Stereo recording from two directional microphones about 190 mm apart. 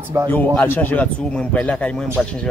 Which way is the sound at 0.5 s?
10° left (ahead or behind).